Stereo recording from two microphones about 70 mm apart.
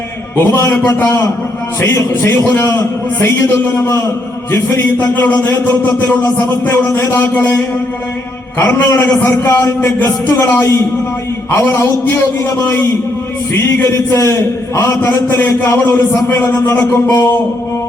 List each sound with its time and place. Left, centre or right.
0.3 s a man's voice: left
1.8 s a man's voice: left
5.1 s a sound: left
6.2 s a man's voice: left